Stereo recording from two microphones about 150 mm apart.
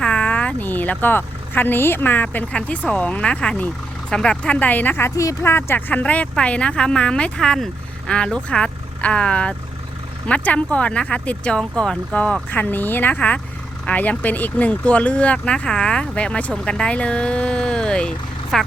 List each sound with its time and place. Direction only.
0.0 s speech: 5° left (ahead or behind)